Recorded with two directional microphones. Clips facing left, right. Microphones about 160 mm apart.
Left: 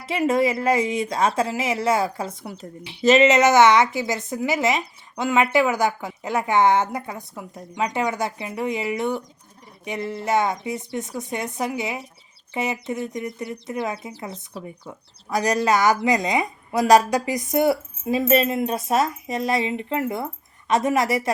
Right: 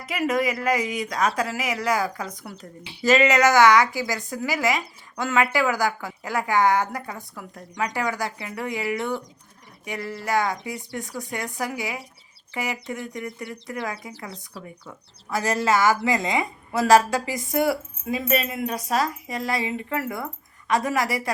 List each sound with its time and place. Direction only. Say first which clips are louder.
0.0 s a woman's voice: left 4 dB; 25° left (ahead or behind)